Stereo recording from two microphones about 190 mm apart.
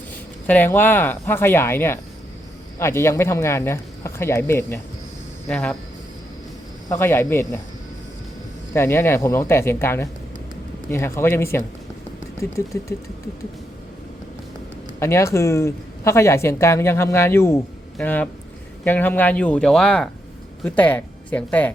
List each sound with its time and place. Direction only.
0.4 s speech: 10° left (ahead or behind)
6.8 s speech: 10° left (ahead or behind)
8.7 s speech: 15° left (ahead or behind)
14.9 s speech: 15° left (ahead or behind)